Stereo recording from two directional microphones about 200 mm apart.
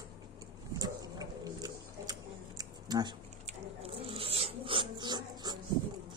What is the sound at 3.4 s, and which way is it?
Dog, 30° right (ahead or behind).